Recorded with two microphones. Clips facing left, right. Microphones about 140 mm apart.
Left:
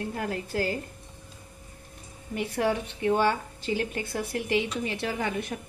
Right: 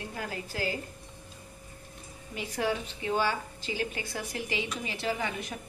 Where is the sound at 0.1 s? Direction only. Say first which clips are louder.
Left 6 dB; 55° left (ahead or behind).